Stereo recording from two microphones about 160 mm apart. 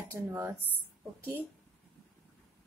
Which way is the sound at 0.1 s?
15° right (ahead or behind).